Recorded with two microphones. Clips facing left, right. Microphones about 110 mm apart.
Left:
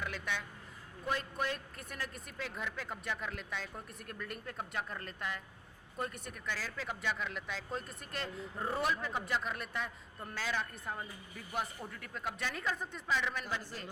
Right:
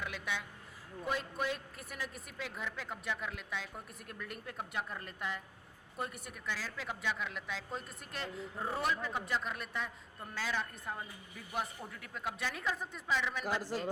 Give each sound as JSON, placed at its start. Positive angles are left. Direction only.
{"t": 0.0, "sound": "a woman's voice", "side_deg": -5}
{"t": 13.4, "sound": "a man's voice", "side_deg": -90}